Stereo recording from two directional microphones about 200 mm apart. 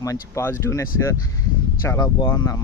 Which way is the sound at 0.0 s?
15° left (ahead or behind).